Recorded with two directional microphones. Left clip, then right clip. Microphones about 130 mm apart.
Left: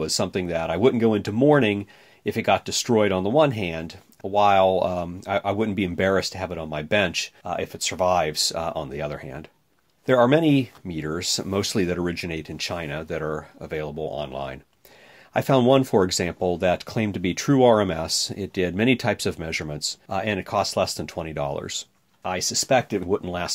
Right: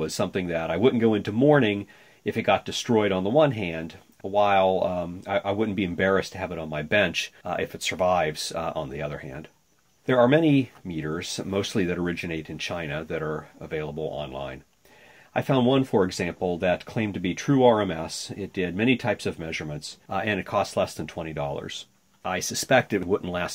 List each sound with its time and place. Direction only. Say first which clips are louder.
0.0 s speech: left 2 dB; 40° left (ahead or behind)
7.4 s speech: even; 25° left (ahead or behind); by 19.9 s 65° left (ahead or behind)
20.1 s speech: even; 40° left (ahead or behind); by 21.8 s 60° left (ahead or behind)
22.2 s speech: left 3 dB; 35° left (ahead or behind)